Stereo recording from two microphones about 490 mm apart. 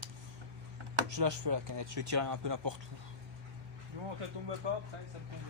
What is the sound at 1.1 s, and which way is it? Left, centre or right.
Speech, right.